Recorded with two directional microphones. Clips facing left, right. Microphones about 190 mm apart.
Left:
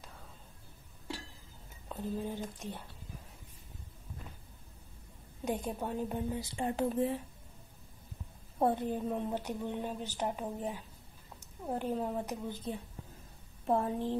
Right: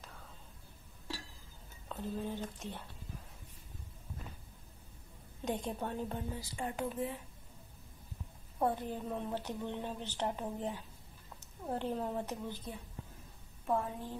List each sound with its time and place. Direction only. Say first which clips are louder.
1.9 s a woman's voice: left 2 dB; 15° left (ahead or behind)
5.4 s a woman's voice: left 2 dB; 10° left (ahead or behind)
6.6 s speech: left 6 dB; 30° left (ahead or behind)
8.5 s a woman's voice: left 4 dB; 20° left (ahead or behind)
13.7 s a woman's voice: left 4 dB; 30° left (ahead or behind)